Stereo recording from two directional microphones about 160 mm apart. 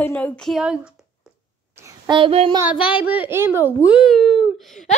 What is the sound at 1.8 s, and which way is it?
Speech, 30° right (ahead or behind).